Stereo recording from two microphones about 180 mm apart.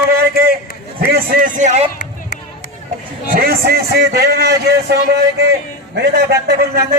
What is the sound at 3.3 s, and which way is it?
A man's voice, 60° right (ahead or behind).